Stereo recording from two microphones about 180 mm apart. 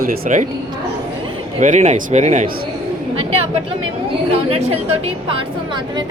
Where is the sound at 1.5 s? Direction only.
40° right (ahead or behind).